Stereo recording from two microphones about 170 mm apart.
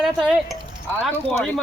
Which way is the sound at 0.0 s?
Centre (ahead or behind).